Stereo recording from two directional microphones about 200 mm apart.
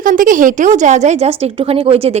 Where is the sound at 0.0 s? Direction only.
40° right (ahead or behind).